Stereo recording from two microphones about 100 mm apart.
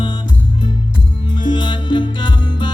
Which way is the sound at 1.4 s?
50° left (ahead or behind).